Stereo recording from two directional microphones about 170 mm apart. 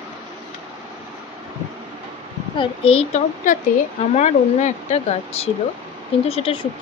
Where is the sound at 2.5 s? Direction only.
30° left (ahead or behind).